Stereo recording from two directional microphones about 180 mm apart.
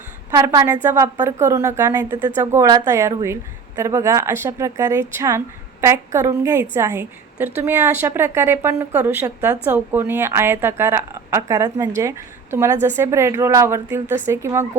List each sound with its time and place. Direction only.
0.3 s a woman's voice: 20° right (ahead or behind)